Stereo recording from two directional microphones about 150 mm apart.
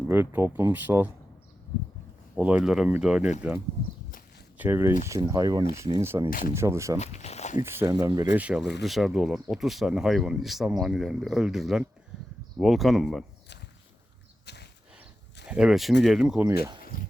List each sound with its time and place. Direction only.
0.1 s speech: 15° right (ahead or behind)
2.3 s speech: 10° right (ahead or behind)
4.5 s speech: 15° right (ahead or behind)
7.0 s speech: 50° left (ahead or behind)
7.6 s speech: 15° right (ahead or behind)
7.9 s speech: 25° right (ahead or behind)
8.4 s speech: 5° right (ahead or behind)
14.5 s a sound: 90° left
15.4 s speech: 5° right (ahead or behind)
16.9 s a sound: 70° left (ahead or behind)